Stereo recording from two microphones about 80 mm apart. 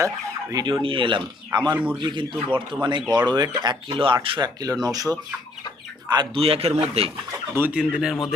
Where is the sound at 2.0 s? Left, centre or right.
Right.